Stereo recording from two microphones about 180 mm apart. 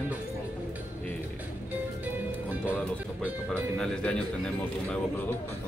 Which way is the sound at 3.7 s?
5° left (ahead or behind).